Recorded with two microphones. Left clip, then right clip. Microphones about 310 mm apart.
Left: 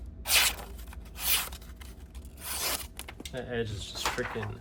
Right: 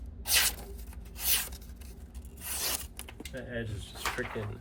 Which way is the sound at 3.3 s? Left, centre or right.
Centre.